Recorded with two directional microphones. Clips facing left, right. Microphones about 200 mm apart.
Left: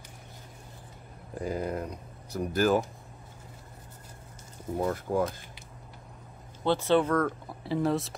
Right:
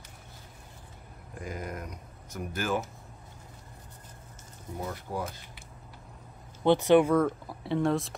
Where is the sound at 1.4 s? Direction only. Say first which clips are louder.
Left 6 dB; 30° left (ahead or behind).